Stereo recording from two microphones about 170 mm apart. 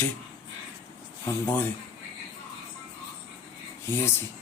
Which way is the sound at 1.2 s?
10° left (ahead or behind).